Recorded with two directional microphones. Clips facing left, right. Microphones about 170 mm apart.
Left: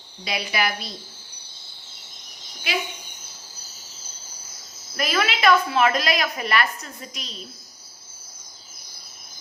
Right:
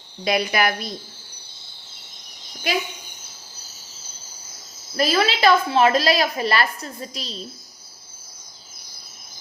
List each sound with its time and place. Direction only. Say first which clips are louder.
0.3 s a woman's voice: right 5 dB; 50° right (ahead or behind)
4.9 s a woman's voice: right 4 dB; 30° right (ahead or behind)